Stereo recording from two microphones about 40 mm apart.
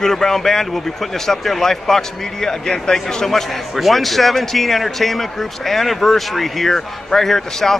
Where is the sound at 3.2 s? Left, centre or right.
Centre.